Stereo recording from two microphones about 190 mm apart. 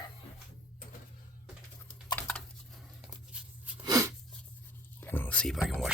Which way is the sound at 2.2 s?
5° left (ahead or behind).